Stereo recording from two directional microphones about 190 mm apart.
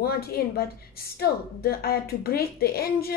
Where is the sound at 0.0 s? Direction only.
55° left (ahead or behind).